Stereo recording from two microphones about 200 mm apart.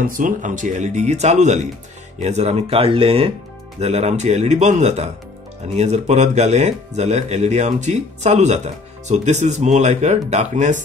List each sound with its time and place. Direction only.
0.0 s speech: 40° right (ahead or behind)